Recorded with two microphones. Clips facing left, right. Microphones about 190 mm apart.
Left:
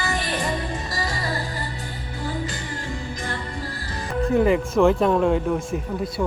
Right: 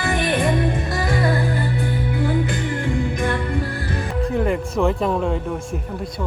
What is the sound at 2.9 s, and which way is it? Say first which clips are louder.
Music: right 9 dB; 60° right (ahead or behind).